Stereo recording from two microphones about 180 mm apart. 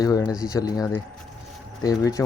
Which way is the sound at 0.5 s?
20° left (ahead or behind).